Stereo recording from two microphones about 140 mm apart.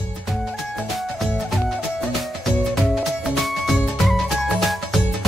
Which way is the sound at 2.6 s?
Centre (ahead or behind).